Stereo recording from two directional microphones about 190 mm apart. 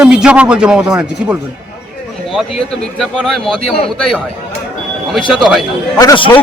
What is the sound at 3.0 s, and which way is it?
Speech, centre (ahead or behind).